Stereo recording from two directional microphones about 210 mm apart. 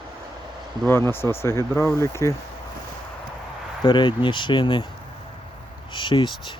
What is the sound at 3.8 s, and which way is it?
Speech, 20° left (ahead or behind).